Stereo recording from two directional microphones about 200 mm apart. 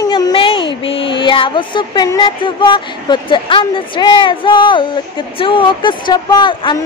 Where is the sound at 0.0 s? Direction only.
20° left (ahead or behind).